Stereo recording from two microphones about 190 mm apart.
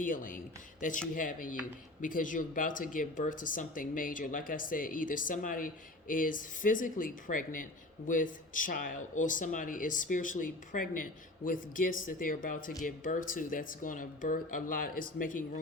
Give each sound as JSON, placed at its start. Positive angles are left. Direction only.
{"t": 0.0, "sound": "speech", "side_deg": 45}